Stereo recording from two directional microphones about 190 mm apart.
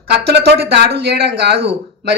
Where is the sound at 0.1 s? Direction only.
60° right (ahead or behind).